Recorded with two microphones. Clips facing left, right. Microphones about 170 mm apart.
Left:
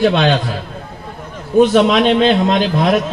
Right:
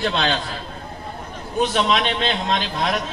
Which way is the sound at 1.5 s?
50° left (ahead or behind).